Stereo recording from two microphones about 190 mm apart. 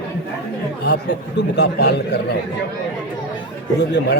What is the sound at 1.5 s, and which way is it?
Speech, 60° left (ahead or behind).